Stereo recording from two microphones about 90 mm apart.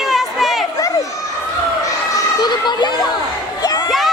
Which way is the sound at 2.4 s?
55° left (ahead or behind).